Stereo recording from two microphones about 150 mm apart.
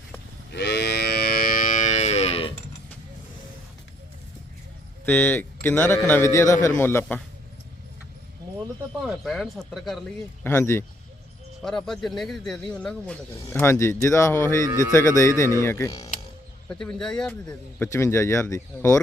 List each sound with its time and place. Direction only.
0.5 s moo: 90° left; by 2.5 s 45° left (ahead or behind)
5.0 s a man's voice: 10° left (ahead or behind)
9.0 s speech: centre (ahead or behind)
10.4 s a man's voice: 15° left (ahead or behind)
11.6 s speech: 5° left (ahead or behind)
13.3 s speech: 20° left (ahead or behind)
14.7 s speech: 25° right (ahead or behind)
14.9 s speech: 20° left (ahead or behind)
16.6 s speech: 5° left (ahead or behind)
17.7 s speech: 20° left (ahead or behind)